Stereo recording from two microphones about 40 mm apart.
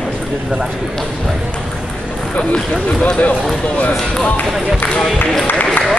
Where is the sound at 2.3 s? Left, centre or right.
Left.